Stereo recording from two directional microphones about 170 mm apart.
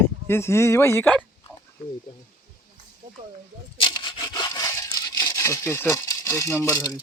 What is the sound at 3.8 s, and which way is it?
Sawing, 25° left (ahead or behind).